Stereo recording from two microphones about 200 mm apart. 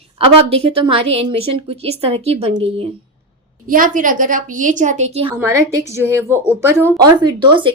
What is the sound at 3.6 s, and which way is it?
A woman's voice, 45° right (ahead or behind).